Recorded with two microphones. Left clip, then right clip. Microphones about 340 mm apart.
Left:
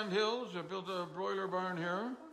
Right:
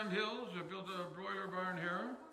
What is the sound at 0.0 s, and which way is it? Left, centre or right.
A man's voice, centre.